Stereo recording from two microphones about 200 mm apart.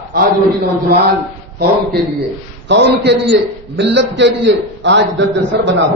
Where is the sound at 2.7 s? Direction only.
60° right (ahead or behind).